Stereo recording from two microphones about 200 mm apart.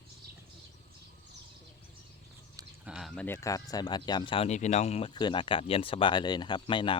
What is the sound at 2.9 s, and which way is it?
Speech, centre (ahead or behind).